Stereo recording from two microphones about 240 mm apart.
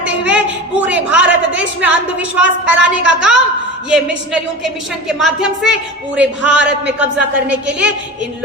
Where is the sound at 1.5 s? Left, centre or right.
Centre.